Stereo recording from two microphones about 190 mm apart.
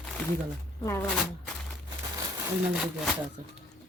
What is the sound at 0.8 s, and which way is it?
Speech, 15° left (ahead or behind).